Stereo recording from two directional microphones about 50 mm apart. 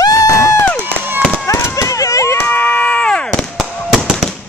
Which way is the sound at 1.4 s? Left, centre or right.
Left.